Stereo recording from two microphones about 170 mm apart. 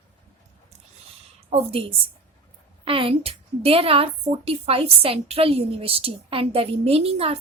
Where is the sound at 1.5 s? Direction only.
35° right (ahead or behind).